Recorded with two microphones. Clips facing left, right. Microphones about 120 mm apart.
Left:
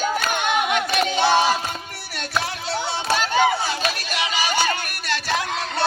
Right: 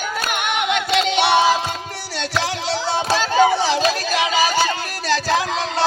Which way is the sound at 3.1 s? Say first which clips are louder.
Right 3 dB; 90° right.